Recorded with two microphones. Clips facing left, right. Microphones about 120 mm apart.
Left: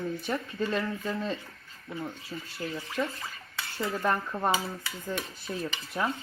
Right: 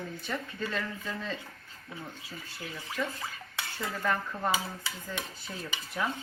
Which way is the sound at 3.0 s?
20° left (ahead or behind).